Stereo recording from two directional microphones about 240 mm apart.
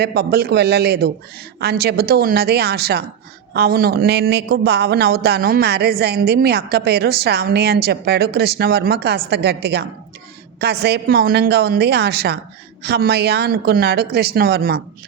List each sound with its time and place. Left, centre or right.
0.0 s a man's voice: right